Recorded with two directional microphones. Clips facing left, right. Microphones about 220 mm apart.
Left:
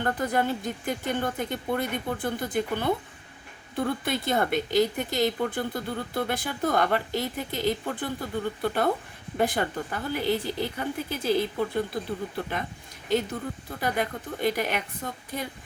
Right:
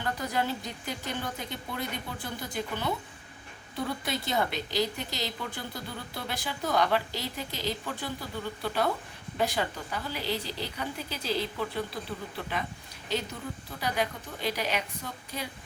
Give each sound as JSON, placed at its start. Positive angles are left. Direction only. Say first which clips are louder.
{"t": 0.0, "sound": "a woman's voice", "louder": "left 5 dB", "side_deg": 55}
{"t": 13.7, "sound": "a woman's voice", "louder": "left 2 dB", "side_deg": 50}